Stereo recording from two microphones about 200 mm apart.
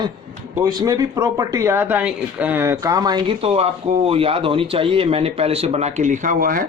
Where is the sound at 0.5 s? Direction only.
20° right (ahead or behind); by 6.7 s 45° right (ahead or behind).